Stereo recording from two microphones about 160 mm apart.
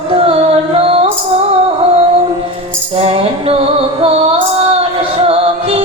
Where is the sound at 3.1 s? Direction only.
35° right (ahead or behind).